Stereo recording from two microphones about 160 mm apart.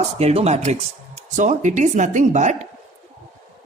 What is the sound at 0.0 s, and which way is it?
A man's voice, 40° right (ahead or behind).